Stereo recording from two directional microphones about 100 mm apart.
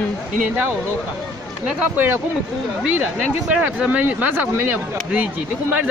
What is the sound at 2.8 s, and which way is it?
Speech, 10° right (ahead or behind).